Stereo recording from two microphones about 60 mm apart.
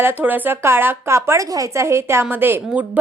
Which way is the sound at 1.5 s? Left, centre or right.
Right.